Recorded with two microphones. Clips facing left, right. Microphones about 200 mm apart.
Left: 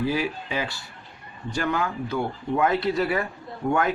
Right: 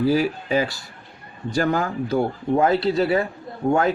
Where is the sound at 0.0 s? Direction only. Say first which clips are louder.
Right 6 dB; 40° right (ahead or behind).